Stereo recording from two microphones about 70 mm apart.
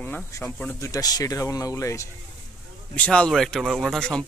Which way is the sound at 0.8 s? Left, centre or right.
Left.